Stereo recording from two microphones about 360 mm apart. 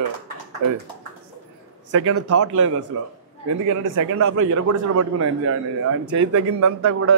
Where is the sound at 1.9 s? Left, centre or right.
Right.